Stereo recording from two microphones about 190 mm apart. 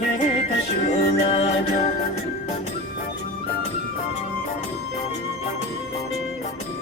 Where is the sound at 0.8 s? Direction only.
35° left (ahead or behind).